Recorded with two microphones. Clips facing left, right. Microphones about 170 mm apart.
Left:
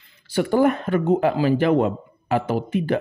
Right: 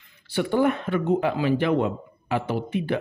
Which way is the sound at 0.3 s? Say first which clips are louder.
Left 3 dB; 40° left (ahead or behind).